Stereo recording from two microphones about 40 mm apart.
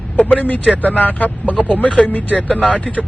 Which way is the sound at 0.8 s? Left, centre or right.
Left.